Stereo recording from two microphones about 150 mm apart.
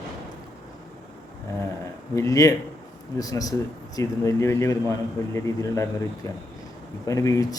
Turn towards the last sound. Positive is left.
turn(degrees=20)  # may be behind; listen again after turning